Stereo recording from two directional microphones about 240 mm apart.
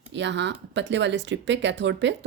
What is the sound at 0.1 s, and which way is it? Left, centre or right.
Speech, right.